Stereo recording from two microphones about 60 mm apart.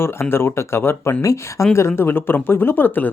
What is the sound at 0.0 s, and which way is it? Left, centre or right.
Speech, left.